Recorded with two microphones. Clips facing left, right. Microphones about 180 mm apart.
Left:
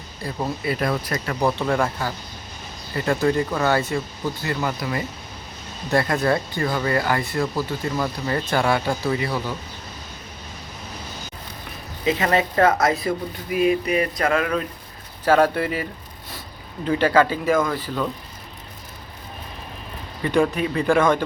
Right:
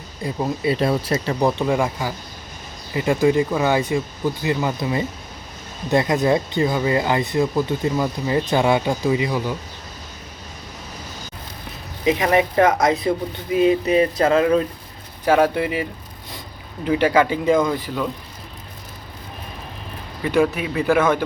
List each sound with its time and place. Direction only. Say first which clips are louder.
0.2 s speech: right 4 dB; 15° right (ahead or behind)
12.0 s speech: right 3 dB; 15° right (ahead or behind)
15.2 s speech: right 1 dB; 10° right (ahead or behind)
20.2 s speech: right 1 dB; 5° right (ahead or behind)